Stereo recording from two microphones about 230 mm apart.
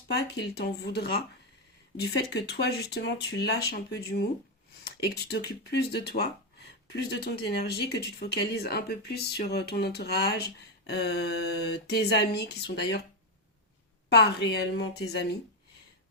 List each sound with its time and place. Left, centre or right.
0.1 s speech: left
14.3 s speech: left